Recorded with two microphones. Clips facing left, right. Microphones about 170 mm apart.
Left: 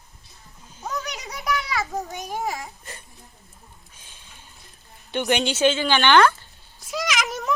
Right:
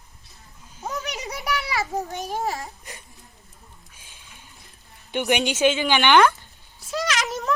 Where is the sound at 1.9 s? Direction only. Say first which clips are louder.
Right 2 dB; 10° right (ahead or behind).